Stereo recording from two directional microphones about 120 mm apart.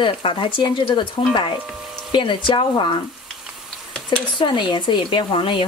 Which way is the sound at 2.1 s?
40° left (ahead or behind).